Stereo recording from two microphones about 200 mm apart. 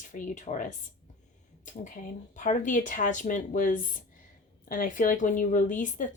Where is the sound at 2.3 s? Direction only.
40° left (ahead or behind).